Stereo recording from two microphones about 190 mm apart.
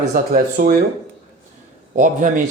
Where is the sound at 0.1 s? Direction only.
50° right (ahead or behind).